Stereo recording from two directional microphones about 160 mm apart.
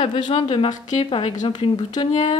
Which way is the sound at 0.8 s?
40° left (ahead or behind).